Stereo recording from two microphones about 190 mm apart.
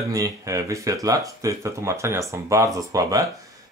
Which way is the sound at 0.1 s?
15° right (ahead or behind).